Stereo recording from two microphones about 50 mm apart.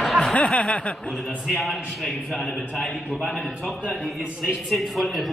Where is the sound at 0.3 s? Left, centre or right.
Left.